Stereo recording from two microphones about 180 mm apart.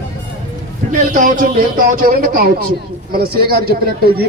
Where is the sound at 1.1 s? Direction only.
45° right (ahead or behind).